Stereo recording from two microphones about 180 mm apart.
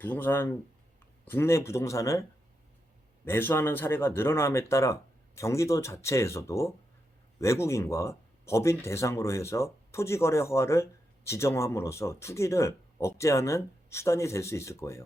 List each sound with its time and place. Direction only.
0.0 s speech: 10° left (ahead or behind)
3.2 s speech: 10° left (ahead or behind)